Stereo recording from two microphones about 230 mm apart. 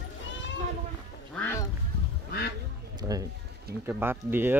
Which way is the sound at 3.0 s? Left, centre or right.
Centre.